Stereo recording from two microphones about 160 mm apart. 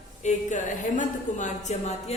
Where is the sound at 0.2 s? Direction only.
50° left (ahead or behind).